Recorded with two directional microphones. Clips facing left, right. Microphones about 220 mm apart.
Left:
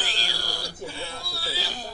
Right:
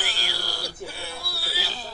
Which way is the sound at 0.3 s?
15° left (ahead or behind).